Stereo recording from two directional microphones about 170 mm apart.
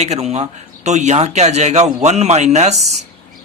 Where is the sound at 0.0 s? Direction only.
40° right (ahead or behind).